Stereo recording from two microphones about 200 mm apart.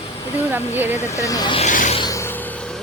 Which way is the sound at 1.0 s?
15° left (ahead or behind).